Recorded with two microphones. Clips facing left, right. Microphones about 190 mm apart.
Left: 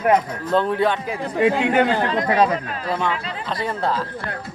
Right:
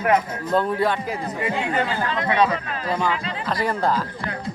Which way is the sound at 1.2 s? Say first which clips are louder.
Left 7 dB; 75° left (ahead or behind).